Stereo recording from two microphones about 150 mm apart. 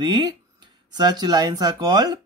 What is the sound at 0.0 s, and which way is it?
Speech, 30° right (ahead or behind).